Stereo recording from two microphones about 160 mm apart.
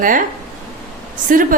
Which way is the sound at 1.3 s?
55° right (ahead or behind).